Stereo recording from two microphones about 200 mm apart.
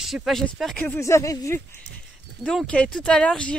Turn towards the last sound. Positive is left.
turn(degrees=5)  # may be behind; listen again after turning